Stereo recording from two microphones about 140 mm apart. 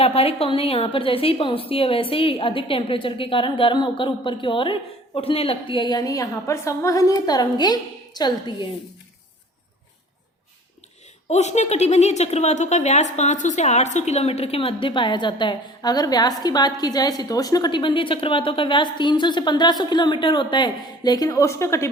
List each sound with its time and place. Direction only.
0.0 s a woman's voice: 45° left (ahead or behind)
11.3 s a woman's voice: 55° left (ahead or behind); by 21.8 s 20° left (ahead or behind)